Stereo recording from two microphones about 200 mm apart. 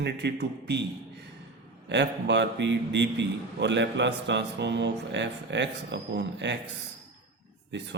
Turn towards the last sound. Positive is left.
turn(degrees=-60)  # may be behind; listen again after turning